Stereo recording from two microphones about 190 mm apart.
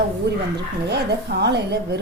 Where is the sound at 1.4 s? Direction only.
60° right (ahead or behind).